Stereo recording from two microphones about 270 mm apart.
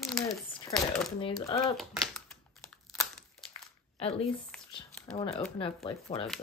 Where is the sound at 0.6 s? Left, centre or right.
Centre.